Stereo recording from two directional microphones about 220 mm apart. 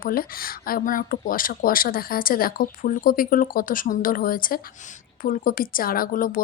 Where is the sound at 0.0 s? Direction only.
40° left (ahead or behind).